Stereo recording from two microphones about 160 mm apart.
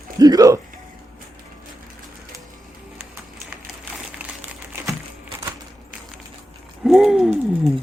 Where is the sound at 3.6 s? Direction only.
10° right (ahead or behind).